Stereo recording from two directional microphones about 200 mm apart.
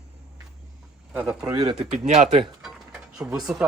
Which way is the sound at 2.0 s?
30° right (ahead or behind).